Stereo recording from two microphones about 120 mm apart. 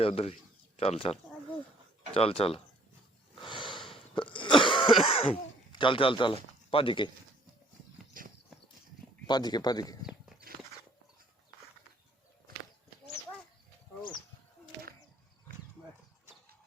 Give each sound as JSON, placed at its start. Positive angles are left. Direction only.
{"t": 0.0, "sound": "speech", "side_deg": 55}
{"t": 3.4, "sound": "cough", "side_deg": 45}
{"t": 5.7, "sound": "speech", "side_deg": 45}
{"t": 9.2, "sound": "speech", "side_deg": 35}